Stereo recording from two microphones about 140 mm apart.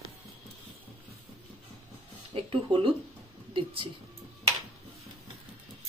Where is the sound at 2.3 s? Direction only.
40° right (ahead or behind).